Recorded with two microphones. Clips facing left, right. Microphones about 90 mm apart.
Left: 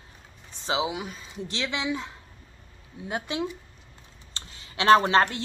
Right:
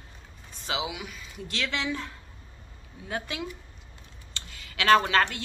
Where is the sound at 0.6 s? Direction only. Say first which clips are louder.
Left 5 dB; 30° left (ahead or behind).